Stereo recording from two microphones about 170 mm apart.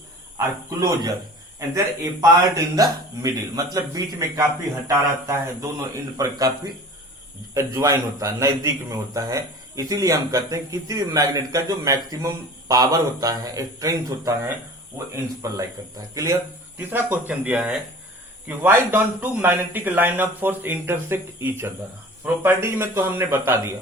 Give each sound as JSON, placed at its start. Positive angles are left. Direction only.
{"t": 0.3, "sound": "a man's voice", "side_deg": -20}
{"t": 7.5, "sound": "a man's voice", "side_deg": -15}
{"t": 16.7, "sound": "speech", "side_deg": -10}